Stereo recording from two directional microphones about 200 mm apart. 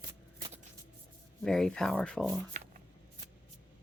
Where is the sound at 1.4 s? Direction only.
5° left (ahead or behind).